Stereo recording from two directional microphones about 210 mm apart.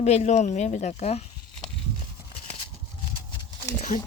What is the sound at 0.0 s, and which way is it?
Speech, 30° left (ahead or behind).